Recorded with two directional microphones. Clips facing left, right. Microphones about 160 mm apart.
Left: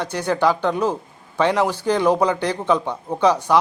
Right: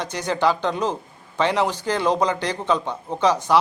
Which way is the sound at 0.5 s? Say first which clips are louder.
Left 3 dB; 10° left (ahead or behind).